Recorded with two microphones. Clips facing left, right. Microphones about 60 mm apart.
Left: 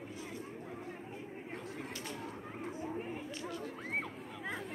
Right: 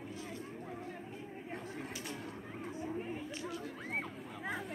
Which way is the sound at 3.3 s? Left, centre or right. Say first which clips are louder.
Even; centre.